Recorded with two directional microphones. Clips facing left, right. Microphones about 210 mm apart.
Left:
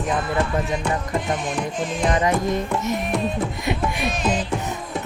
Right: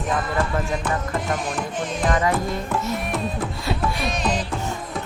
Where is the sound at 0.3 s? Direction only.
20° left (ahead or behind).